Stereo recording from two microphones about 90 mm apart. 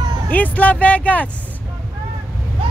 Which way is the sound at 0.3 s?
20° left (ahead or behind).